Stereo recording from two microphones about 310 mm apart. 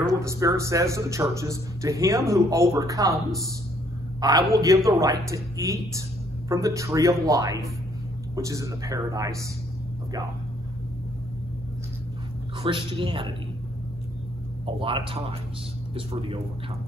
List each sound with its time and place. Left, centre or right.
0.0 s speech: centre
4.2 s speech: centre
12.6 s speech: centre
14.8 s speech: centre